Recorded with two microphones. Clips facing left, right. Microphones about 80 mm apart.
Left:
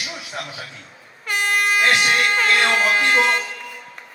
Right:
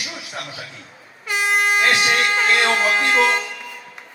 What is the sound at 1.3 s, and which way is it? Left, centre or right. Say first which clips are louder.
Air horn: even; left.